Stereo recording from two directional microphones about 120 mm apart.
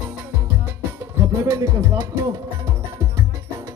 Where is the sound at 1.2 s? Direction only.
25° right (ahead or behind).